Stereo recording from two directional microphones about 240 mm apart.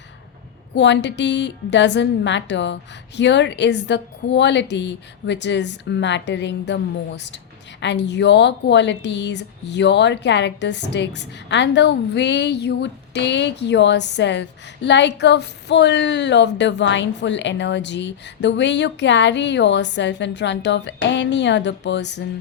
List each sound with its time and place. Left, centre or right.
0.8 s speech: left